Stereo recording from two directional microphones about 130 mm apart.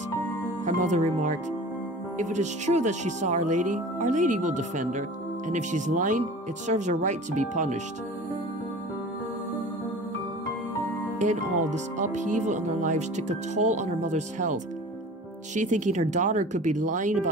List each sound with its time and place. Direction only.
0.7 s speech: 65° right (ahead or behind)
11.1 s speech: 70° right (ahead or behind)